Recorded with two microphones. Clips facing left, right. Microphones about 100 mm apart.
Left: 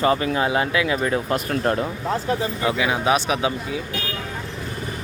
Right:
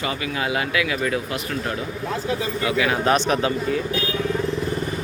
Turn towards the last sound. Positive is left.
turn(degrees=10)  # may be behind; listen again after turning